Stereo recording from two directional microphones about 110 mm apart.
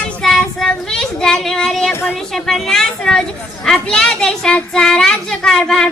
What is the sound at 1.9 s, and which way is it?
Speech, 20° left (ahead or behind).